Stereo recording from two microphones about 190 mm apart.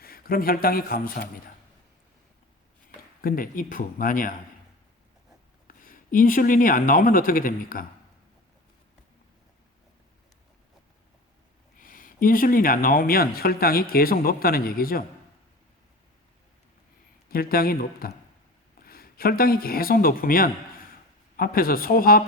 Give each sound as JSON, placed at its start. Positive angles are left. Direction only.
{"t": 0.0, "sound": "a man's voice", "side_deg": 50}
{"t": 3.2, "sound": "speech", "side_deg": 50}
{"t": 5.6, "sound": "speech", "side_deg": 45}
{"t": 11.8, "sound": "speech", "side_deg": 45}
{"t": 17.2, "sound": "speech", "side_deg": 50}